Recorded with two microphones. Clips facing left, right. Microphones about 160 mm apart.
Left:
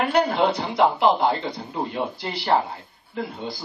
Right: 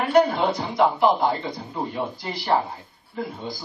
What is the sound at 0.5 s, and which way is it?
Speech, 65° left (ahead or behind).